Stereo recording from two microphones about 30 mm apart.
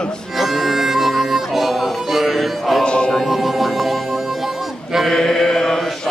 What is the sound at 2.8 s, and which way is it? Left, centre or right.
Music, left.